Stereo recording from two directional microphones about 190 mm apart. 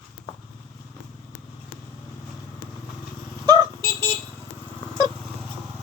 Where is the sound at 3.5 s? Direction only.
15° left (ahead or behind).